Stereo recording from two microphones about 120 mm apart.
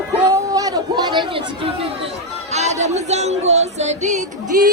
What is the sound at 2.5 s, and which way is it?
Speech, 65° right (ahead or behind).